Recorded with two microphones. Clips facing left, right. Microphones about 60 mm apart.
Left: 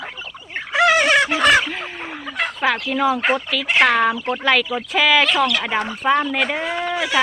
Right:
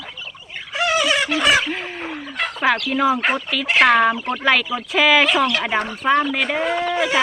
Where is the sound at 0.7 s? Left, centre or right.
Left.